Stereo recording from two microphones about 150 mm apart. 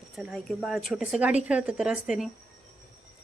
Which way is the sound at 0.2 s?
Centre (ahead or behind).